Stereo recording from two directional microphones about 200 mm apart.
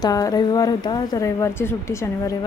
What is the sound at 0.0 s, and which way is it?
A woman's voice, 20° left (ahead or behind).